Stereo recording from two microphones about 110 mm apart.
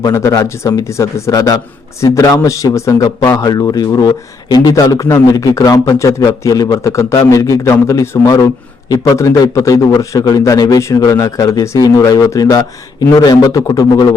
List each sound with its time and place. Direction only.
0.1 s speech: 25° left (ahead or behind)